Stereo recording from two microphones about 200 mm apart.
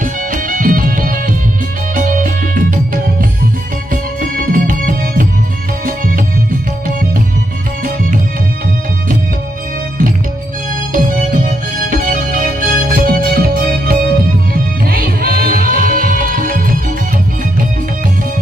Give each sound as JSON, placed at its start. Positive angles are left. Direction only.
{"t": 0.0, "sound": "music", "side_deg": -45}
{"t": 10.9, "sound": "music", "side_deg": -45}